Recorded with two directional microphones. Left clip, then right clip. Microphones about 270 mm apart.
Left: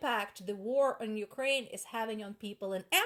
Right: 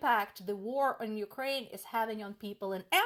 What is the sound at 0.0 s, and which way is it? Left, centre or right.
Speech, right.